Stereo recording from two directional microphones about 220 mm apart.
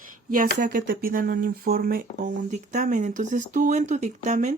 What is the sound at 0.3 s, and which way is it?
Speech, 40° right (ahead or behind).